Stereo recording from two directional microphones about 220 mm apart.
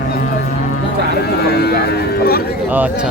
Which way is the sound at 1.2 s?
45° left (ahead or behind).